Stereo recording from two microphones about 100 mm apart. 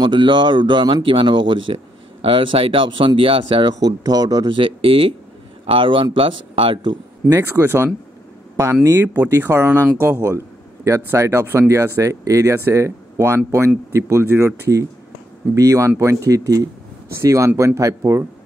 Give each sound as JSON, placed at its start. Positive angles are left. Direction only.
{"t": 0.0, "sound": "speech", "side_deg": -55}
{"t": 3.8, "sound": "speech", "side_deg": -40}
{"t": 4.5, "sound": "speech", "side_deg": -60}
{"t": 7.2, "sound": "a man's voice", "side_deg": -30}